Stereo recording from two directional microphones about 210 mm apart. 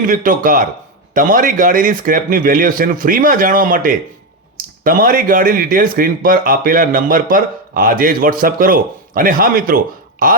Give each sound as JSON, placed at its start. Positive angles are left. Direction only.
{"t": 0.0, "sound": "speech", "side_deg": -40}